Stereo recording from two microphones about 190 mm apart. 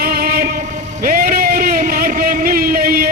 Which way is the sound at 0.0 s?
50° right (ahead or behind).